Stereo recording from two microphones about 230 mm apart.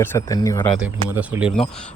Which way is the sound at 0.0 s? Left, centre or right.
Centre.